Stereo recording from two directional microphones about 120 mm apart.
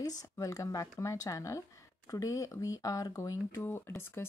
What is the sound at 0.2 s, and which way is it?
Speech, 30° left (ahead or behind).